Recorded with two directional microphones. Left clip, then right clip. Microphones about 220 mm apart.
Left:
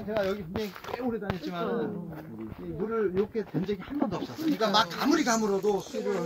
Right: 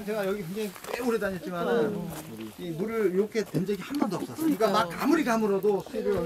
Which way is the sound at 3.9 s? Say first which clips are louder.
Right 1 dB; 10° right (ahead or behind).